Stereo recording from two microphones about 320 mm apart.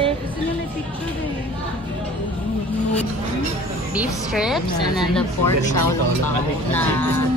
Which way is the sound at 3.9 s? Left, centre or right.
Centre.